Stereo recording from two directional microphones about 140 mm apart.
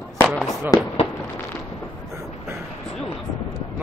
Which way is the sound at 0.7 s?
25° left (ahead or behind).